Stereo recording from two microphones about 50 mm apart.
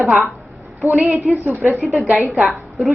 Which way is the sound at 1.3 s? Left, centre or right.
Centre.